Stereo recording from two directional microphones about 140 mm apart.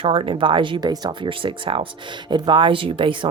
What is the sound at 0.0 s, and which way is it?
Speech, 40° right (ahead or behind).